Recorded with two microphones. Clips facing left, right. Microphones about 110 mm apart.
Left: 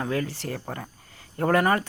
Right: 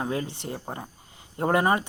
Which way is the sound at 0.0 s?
20° right (ahead or behind).